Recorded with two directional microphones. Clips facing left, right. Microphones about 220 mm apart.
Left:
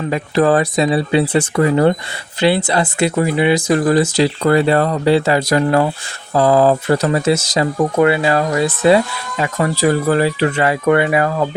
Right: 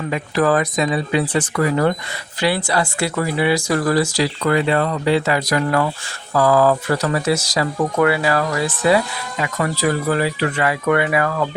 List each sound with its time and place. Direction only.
0.1 s speech: 30° left (ahead or behind)
4.4 s speech: 35° left (ahead or behind)